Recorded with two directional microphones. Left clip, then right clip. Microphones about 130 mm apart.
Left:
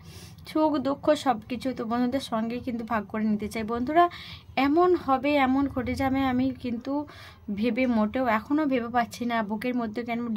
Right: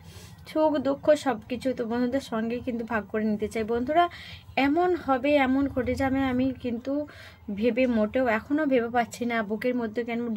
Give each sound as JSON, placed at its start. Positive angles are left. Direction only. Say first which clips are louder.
{"t": 0.6, "sound": "a woman's voice", "louder": "right 1 dB", "side_deg": 35}